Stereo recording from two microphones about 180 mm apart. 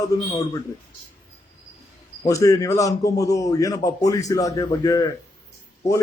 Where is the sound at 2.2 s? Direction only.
20° left (ahead or behind).